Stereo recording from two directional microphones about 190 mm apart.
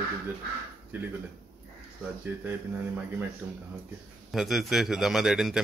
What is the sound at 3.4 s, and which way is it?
A man's voice, 10° right (ahead or behind).